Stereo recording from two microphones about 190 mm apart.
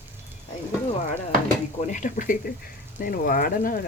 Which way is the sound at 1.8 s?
40° left (ahead or behind).